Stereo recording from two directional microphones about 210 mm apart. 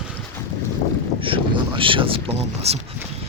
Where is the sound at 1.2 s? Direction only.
25° right (ahead or behind).